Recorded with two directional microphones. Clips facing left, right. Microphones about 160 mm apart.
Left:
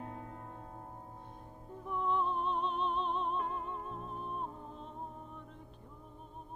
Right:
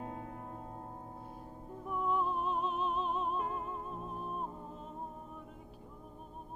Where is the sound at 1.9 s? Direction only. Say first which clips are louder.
Even; 5° right (ahead or behind).